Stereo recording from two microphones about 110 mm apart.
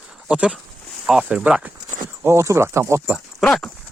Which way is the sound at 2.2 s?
25° right (ahead or behind).